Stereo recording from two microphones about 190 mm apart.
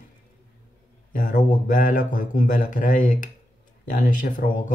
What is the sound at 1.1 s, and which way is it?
Speech, 45° left (ahead or behind).